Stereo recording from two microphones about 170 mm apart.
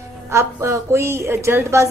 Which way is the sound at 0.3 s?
15° right (ahead or behind).